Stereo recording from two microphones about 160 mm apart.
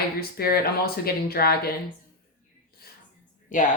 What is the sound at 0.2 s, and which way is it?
Speech, 70° left (ahead or behind).